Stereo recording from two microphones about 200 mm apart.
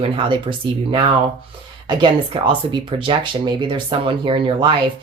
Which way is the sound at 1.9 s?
25° right (ahead or behind).